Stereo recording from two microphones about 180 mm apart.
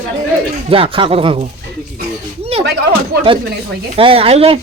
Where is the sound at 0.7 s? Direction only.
30° right (ahead or behind).